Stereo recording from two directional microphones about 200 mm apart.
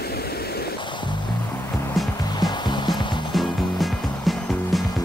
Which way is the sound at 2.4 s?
20° left (ahead or behind).